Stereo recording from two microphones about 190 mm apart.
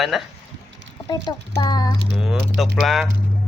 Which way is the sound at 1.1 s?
20° left (ahead or behind).